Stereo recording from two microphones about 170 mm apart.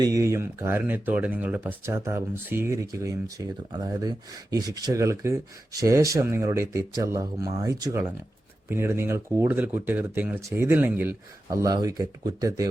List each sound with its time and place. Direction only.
0.0 s speech: 20° right (ahead or behind)
11.5 s speech: 20° right (ahead or behind)